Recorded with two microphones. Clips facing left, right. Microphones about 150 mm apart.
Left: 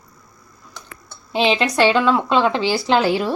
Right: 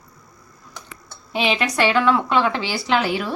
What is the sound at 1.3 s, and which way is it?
A woman's voice, 25° left (ahead or behind).